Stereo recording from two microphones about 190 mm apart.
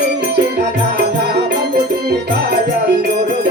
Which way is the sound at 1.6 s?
60° right (ahead or behind).